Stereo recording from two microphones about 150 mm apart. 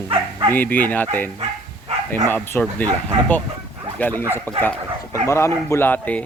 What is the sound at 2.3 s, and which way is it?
Speech, 15° left (ahead or behind).